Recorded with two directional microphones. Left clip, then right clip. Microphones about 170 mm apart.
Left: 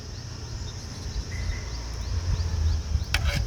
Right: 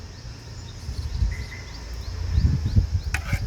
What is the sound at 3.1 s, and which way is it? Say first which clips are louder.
Insect: left 3 dB; 90° left.